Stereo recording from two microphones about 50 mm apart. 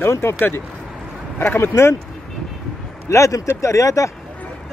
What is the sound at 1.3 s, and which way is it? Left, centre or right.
Speech, left.